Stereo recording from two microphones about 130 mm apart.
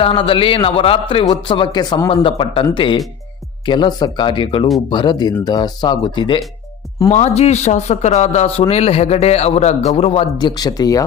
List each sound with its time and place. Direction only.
0.0 s a man's voice: 45° left (ahead or behind)
7.1 s a man's voice: 60° left (ahead or behind)
10.3 s speech: 30° left (ahead or behind)